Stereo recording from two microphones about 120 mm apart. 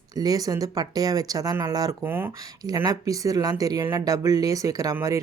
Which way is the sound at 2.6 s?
30° right (ahead or behind).